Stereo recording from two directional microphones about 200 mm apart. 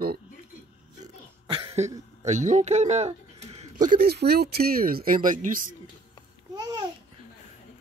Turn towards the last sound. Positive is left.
turn(degrees=-20)  # may be behind; listen again after turning